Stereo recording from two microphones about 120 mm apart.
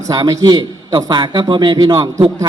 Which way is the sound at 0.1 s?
30° right (ahead or behind).